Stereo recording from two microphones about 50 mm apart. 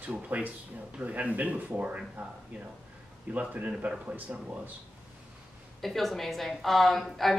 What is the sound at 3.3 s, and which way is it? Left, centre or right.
Speech, right.